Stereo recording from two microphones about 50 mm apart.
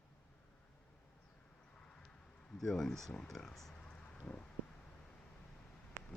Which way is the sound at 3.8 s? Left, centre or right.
Centre.